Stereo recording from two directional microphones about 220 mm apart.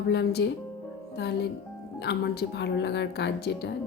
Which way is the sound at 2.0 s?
50° left (ahead or behind).